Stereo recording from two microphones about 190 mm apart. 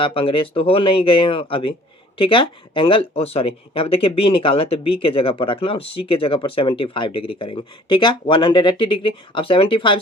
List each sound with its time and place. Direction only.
0.0 s speech: 30° left (ahead or behind)